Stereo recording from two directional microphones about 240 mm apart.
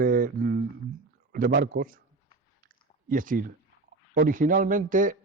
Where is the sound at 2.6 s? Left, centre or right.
Right.